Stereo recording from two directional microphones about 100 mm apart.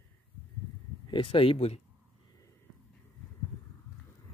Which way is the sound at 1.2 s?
65° left (ahead or behind).